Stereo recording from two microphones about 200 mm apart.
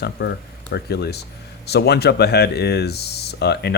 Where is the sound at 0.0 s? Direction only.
55° left (ahead or behind).